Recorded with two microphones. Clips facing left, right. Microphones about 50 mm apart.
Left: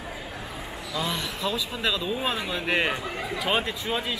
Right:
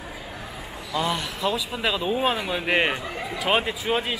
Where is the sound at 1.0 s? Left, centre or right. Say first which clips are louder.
Right 3 dB; centre.